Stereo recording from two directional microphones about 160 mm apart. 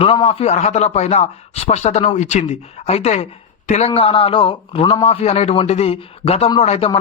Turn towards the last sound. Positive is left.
turn(degrees=40)  # may be behind; listen again after turning